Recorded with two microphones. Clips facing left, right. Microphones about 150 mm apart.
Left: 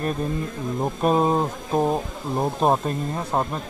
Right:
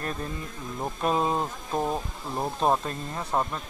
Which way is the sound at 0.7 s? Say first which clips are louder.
Left 6 dB; 25° left (ahead or behind).